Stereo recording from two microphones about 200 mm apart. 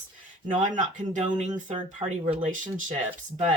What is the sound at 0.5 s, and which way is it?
Speech, 40° right (ahead or behind).